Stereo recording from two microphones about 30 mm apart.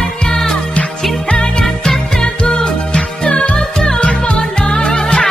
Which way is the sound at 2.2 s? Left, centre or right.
Left.